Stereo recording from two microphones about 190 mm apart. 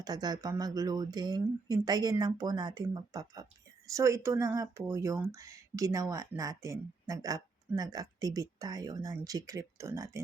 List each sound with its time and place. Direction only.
0.0 s speech: 20° right (ahead or behind)